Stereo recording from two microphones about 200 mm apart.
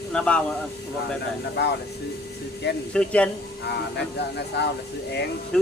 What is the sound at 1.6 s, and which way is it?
Speech, 55° left (ahead or behind).